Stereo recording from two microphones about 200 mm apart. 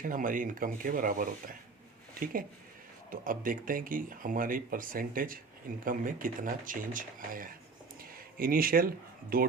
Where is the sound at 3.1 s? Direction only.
45° right (ahead or behind).